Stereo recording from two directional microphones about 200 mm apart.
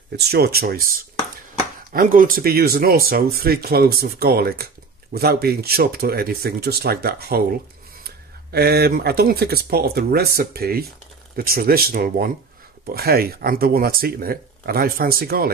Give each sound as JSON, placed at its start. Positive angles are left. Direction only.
{"t": 0.2, "sound": "speech", "side_deg": -50}
{"t": 8.5, "sound": "speech", "side_deg": -55}